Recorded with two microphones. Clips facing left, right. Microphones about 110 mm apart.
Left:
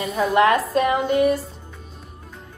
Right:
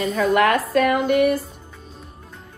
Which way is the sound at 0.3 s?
30° left (ahead or behind).